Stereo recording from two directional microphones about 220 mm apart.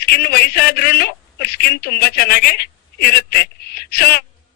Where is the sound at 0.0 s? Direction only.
45° left (ahead or behind).